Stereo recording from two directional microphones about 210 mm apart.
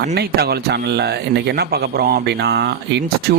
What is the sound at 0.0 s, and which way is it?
Speech, 50° right (ahead or behind).